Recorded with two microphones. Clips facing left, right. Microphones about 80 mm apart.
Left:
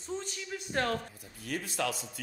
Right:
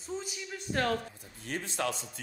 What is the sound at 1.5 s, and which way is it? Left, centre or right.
Speech, right.